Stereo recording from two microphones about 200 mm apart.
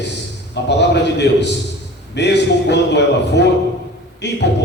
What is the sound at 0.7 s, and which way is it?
A man's voice, 60° left (ahead or behind).